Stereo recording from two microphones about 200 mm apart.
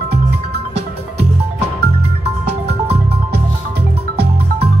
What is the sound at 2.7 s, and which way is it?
Music, 55° right (ahead or behind).